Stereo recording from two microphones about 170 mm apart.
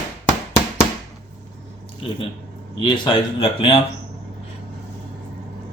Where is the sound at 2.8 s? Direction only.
30° left (ahead or behind).